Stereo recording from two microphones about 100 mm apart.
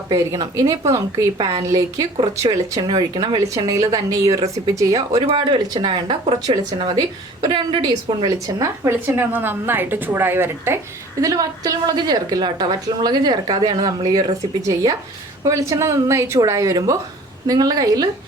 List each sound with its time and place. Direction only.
0.1 s speech: 30° right (ahead or behind)
1.4 s a woman's voice: 45° right (ahead or behind)
1.6 s speech: 30° right (ahead or behind)
2.9 s a woman's voice: 45° right (ahead or behind)
3.4 s speech: 35° right (ahead or behind)
5.2 s a woman's voice: 55° right (ahead or behind)
8.2 s a woman's voice: 40° right (ahead or behind); by 10.8 s 25° right (ahead or behind)
11.2 s a woman's voice: 35° right (ahead or behind)
15.4 s a woman's voice: 30° right (ahead or behind)